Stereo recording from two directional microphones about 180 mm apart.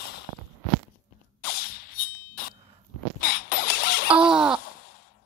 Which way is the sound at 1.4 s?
55° left (ahead or behind).